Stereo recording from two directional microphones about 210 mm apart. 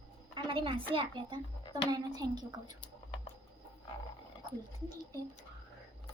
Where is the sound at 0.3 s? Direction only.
25° right (ahead or behind).